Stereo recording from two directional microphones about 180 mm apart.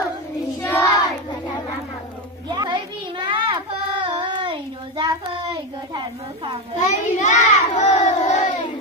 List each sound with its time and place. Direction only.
0.6 s child singing: 15° left (ahead or behind)
2.5 s a sound: 25° right (ahead or behind)
3.3 s child singing: 25° right (ahead or behind)
6.8 s child singing: 40° left (ahead or behind)